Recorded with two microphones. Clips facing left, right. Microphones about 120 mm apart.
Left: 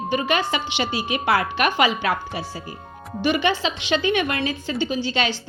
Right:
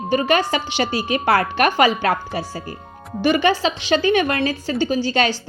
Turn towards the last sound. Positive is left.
turn(degrees=-40)  # may be behind; listen again after turning